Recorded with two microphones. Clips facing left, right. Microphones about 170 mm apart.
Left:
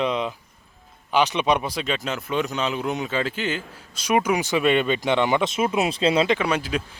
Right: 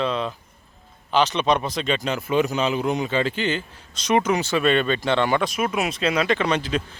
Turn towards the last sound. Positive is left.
turn(degrees=10)  # may be behind; listen again after turning